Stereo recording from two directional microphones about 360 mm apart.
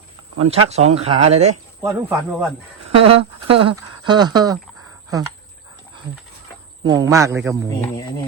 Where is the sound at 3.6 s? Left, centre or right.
Centre.